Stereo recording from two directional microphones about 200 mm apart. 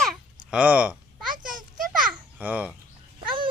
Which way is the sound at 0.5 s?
5° right (ahead or behind).